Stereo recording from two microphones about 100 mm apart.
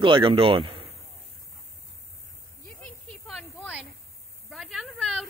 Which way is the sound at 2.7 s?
10° left (ahead or behind).